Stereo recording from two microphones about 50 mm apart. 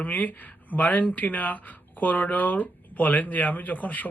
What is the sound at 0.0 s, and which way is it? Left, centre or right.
Speech, left.